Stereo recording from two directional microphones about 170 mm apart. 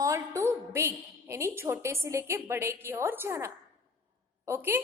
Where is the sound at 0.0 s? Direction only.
20° right (ahead or behind).